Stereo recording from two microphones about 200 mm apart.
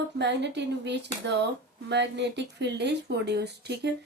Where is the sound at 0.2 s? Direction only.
60° right (ahead or behind).